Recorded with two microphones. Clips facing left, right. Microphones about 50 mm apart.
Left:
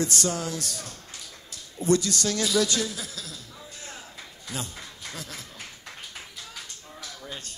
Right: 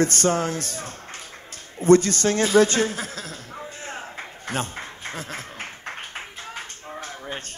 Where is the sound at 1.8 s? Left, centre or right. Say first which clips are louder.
Right 8 dB; right.